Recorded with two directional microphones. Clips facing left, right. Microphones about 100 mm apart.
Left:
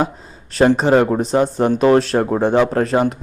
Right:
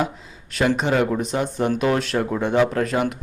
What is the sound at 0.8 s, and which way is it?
Speech, 35° left (ahead or behind).